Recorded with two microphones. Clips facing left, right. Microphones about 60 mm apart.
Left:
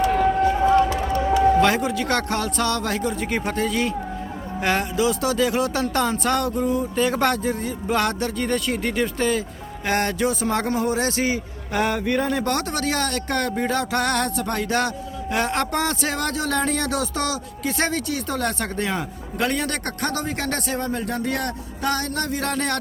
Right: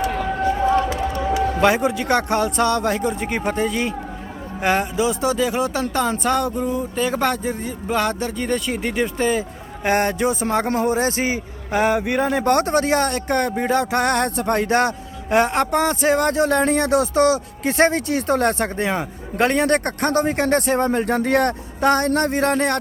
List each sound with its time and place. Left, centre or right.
1.6 s music: centre
3.1 s speech: centre
9.8 s music: right
12.3 s music: right
15.4 s music: centre
19.4 s speech: right